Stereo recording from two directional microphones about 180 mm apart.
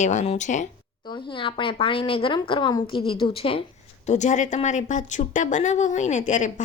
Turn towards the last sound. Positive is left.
turn(degrees=45)  # may be behind; listen again after turning